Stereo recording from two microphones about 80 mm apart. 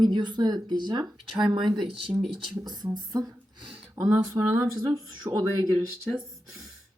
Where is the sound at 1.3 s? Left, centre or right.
Right.